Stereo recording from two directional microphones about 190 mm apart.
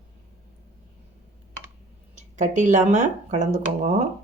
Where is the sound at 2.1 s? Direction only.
40° right (ahead or behind).